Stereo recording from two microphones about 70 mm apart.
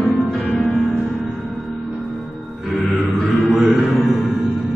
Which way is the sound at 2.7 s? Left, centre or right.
Centre.